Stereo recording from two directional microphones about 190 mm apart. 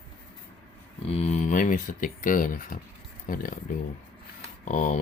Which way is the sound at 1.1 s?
35° left (ahead or behind).